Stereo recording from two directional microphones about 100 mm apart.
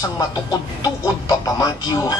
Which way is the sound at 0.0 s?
40° left (ahead or behind).